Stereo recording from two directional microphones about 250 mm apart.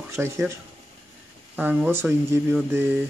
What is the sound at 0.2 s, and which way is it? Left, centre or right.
Speech, centre.